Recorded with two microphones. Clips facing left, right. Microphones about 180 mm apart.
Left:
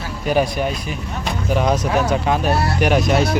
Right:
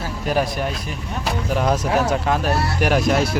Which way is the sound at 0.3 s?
Centre (ahead or behind).